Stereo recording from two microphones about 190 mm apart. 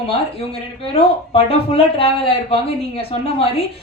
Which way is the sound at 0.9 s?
30° left (ahead or behind).